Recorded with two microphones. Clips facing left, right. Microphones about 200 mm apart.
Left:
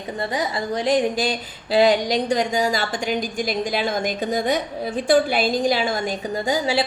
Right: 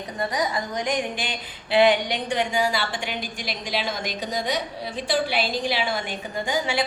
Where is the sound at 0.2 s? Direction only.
30° left (ahead or behind).